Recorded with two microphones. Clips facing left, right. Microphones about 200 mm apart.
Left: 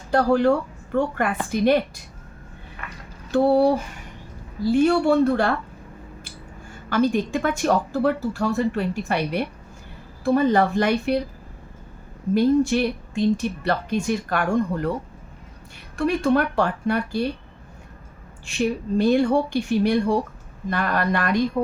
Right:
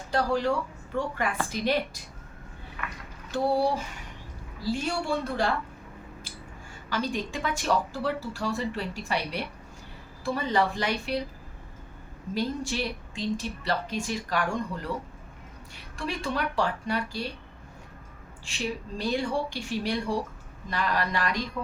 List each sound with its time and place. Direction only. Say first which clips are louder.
0.1 s a woman's voice: left 8 dB; 55° left (ahead or behind)
3.3 s a woman's voice: left 8 dB; 60° left (ahead or behind)
6.9 s a woman's voice: left 10 dB; 55° left (ahead or behind)
12.3 s a woman's voice: left 12 dB; 55° left (ahead or behind)
16.0 s a woman's voice: left 11 dB; 55° left (ahead or behind)
18.4 s a woman's voice: left 9 dB; 55° left (ahead or behind)